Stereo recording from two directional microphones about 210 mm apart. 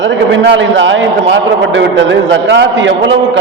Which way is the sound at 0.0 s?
60° right (ahead or behind).